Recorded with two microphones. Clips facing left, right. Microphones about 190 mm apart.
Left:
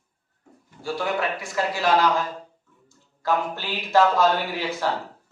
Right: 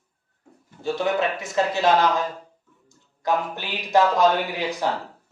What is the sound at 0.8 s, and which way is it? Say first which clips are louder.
A man's voice: right 3 dB; 20° right (ahead or behind).